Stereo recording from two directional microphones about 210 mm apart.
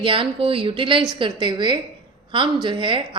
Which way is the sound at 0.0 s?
25° right (ahead or behind).